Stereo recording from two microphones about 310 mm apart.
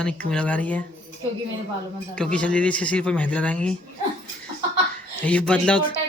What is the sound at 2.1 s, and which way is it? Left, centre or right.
Speech, centre.